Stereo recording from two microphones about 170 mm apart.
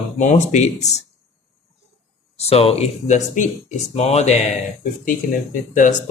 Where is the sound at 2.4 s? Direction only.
35° left (ahead or behind).